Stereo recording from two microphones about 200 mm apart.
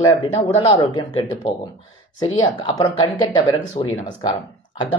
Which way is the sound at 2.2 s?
20° left (ahead or behind).